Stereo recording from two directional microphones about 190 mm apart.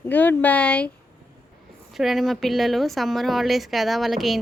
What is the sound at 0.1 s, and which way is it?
Speech, 10° left (ahead or behind).